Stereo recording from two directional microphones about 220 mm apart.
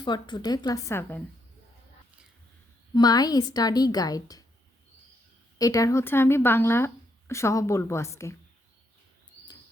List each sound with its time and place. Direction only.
0.0 s speech: 20° left (ahead or behind)
2.9 s speech: 15° left (ahead or behind)
5.5 s speech: 15° left (ahead or behind)